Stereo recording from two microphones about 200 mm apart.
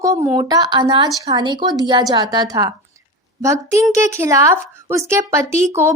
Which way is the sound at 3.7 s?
15° right (ahead or behind).